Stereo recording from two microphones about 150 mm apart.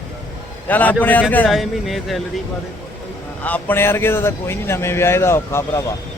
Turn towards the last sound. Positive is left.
turn(degrees=15)  # may be behind; listen again after turning